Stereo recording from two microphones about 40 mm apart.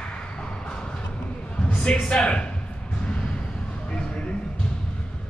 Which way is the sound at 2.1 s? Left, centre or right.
Left.